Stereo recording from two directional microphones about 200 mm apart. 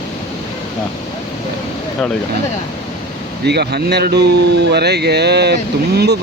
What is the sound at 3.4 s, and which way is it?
A man's voice, 55° right (ahead or behind).